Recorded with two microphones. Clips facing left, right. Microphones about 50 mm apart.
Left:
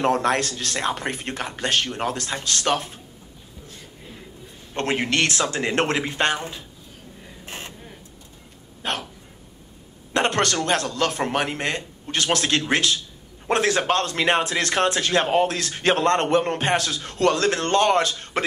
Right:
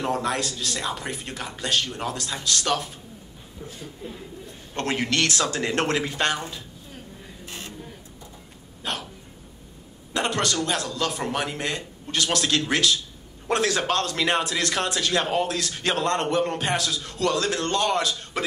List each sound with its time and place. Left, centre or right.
0.0 s a man's voice: left
4.7 s speech: left
7.4 s a sound: left
8.8 s a man's voice: left
10.1 s a man's voice: left